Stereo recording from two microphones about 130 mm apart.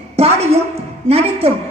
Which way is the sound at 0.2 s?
55° right (ahead or behind).